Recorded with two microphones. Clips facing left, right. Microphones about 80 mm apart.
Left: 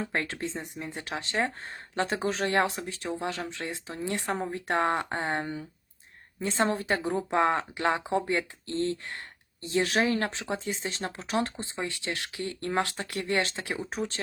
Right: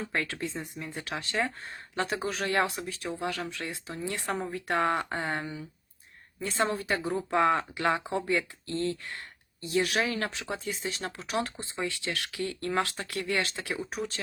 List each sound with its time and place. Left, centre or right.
0.1 s speech: left